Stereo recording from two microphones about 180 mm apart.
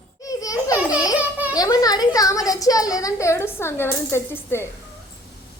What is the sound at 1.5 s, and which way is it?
Speech, 20° left (ahead or behind).